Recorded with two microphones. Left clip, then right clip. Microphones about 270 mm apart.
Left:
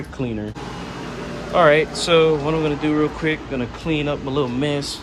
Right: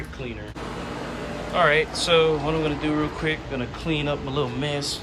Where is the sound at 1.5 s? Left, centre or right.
Centre.